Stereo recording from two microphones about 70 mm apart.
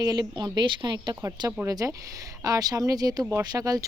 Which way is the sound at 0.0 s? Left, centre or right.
Right.